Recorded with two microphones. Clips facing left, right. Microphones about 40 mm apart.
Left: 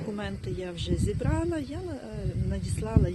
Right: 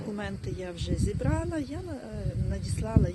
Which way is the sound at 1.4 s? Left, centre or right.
Left.